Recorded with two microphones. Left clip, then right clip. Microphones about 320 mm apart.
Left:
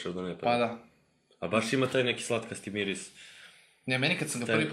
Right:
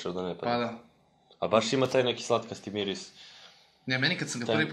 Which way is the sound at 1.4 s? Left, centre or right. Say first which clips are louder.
Right 3 dB; centre.